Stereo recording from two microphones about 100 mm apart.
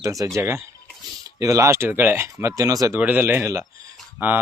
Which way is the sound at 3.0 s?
20° right (ahead or behind).